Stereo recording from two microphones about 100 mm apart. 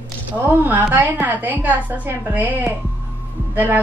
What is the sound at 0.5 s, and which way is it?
A woman's voice, 20° right (ahead or behind).